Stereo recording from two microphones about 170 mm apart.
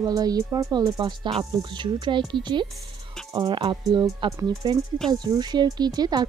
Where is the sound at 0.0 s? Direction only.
20° right (ahead or behind).